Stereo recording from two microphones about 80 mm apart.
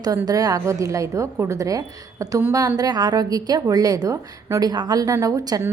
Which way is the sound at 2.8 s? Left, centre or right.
Right.